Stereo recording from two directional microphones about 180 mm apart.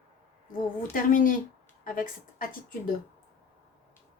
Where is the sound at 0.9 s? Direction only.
50° left (ahead or behind).